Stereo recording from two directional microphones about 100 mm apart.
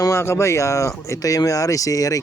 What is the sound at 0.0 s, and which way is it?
Speech, 25° left (ahead or behind).